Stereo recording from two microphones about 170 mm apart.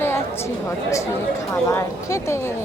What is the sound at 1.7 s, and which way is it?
Speech, 15° left (ahead or behind).